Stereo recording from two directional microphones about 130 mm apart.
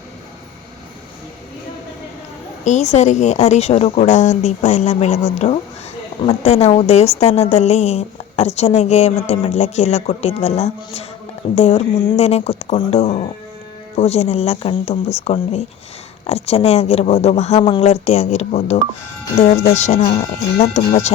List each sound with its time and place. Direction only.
2.6 s a woman's voice: 60° left (ahead or behind)